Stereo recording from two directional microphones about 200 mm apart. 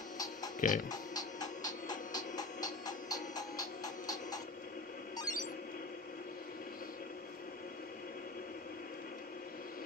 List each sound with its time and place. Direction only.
0.6 s music: 40° left (ahead or behind)
0.8 s music: 20° left (ahead or behind)
5.1 s a sound: 20° left (ahead or behind)